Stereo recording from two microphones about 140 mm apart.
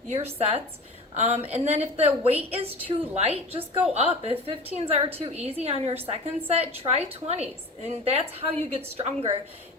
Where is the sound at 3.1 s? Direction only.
45° right (ahead or behind).